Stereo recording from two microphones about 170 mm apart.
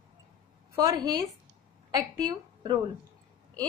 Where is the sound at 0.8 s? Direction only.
20° right (ahead or behind).